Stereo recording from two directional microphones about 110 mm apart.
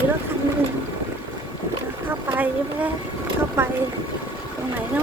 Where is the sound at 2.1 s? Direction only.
20° right (ahead or behind).